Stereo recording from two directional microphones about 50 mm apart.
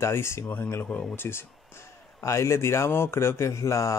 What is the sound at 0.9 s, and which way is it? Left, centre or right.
Speech, centre.